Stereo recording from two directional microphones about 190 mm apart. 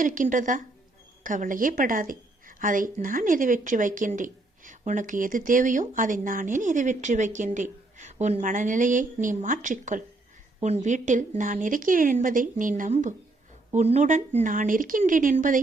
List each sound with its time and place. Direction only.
0.0 s a woman's voice: 45° right (ahead or behind)